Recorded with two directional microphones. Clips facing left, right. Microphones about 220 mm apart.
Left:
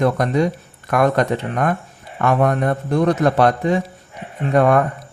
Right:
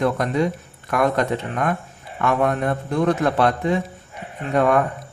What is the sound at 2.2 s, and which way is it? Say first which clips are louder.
A man's voice: left 3 dB; 50° left (ahead or behind).